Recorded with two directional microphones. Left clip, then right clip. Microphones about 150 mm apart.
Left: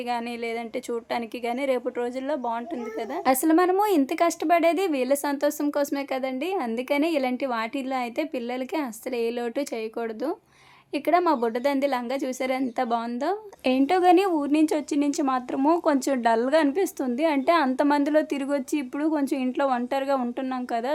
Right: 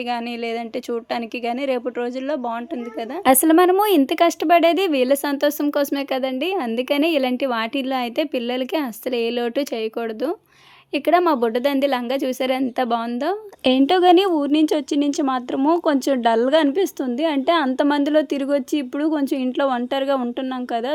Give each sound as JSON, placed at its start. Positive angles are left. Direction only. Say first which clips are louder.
{"t": 1.1, "sound": "a woman's voice", "louder": "right 3 dB", "side_deg": -25}
{"t": 3.2, "sound": "speech", "louder": "right 7 dB", "side_deg": -45}
{"t": 10.9, "sound": "a woman's voice", "louder": "right 5 dB", "side_deg": -30}